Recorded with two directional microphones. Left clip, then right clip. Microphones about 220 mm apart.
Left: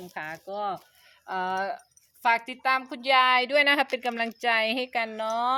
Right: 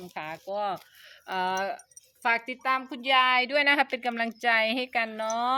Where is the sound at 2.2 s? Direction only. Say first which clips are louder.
Left 2 dB; 10° left (ahead or behind).